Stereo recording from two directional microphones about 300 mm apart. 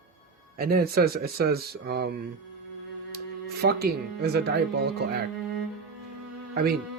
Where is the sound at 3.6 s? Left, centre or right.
Right.